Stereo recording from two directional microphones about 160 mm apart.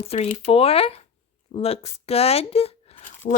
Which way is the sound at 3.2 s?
55° left (ahead or behind).